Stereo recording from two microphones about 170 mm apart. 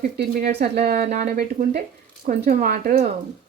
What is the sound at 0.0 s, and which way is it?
Speech, 50° right (ahead or behind).